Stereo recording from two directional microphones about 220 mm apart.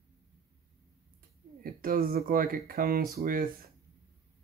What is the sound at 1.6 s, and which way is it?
Speech, 40° right (ahead or behind).